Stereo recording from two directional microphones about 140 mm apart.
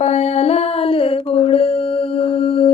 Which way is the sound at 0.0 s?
50° left (ahead or behind).